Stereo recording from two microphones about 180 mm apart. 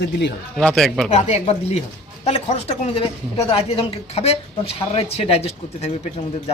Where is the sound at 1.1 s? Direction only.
35° left (ahead or behind).